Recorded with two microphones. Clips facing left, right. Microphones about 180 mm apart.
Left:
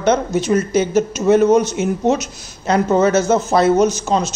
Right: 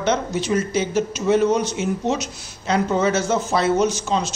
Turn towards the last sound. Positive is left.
turn(degrees=40)  # may be behind; listen again after turning